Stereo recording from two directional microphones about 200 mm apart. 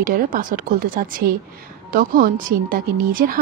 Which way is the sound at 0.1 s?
45° right (ahead or behind).